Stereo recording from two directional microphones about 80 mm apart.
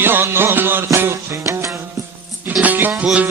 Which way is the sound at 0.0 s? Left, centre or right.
Right.